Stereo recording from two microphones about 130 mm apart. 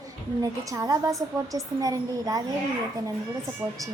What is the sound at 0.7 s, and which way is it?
Speech, 25° right (ahead or behind).